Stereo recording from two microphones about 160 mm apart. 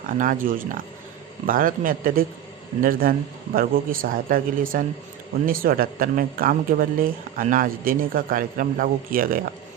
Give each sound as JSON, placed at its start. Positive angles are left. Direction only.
{"t": 0.0, "sound": "a man's voice", "side_deg": -60}